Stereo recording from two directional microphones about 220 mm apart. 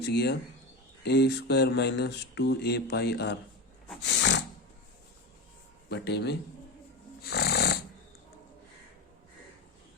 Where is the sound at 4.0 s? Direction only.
55° left (ahead or behind).